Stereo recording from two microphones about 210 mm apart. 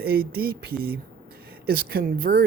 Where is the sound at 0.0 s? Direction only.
45° right (ahead or behind).